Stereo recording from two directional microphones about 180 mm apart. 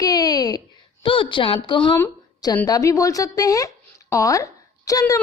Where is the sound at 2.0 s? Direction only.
20° left (ahead or behind).